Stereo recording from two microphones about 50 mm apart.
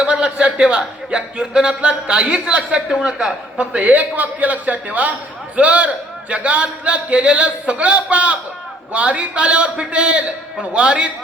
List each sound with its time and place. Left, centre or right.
0.0 s a man's voice: centre